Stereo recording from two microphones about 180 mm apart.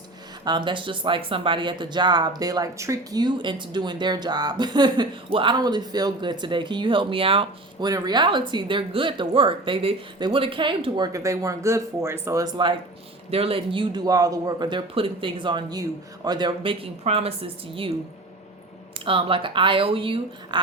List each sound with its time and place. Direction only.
0.4 s speech: 25° right (ahead or behind)
18.9 s speech: 30° right (ahead or behind)